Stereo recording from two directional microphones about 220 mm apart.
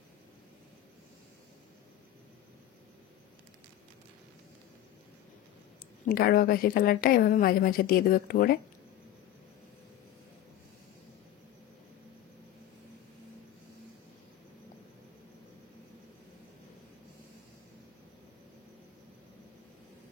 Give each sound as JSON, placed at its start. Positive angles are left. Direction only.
{"t": 6.0, "sound": "a woman's voice", "side_deg": 40}